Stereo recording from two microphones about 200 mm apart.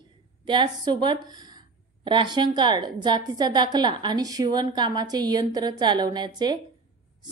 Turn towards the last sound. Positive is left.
turn(degrees=-20)  # may be behind; listen again after turning